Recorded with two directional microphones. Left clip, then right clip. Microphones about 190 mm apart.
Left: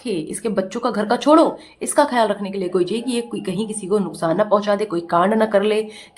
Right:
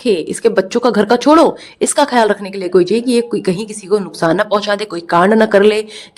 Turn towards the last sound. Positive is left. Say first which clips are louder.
# right 7 dB
turn(degrees=-35)  # may be behind; listen again after turning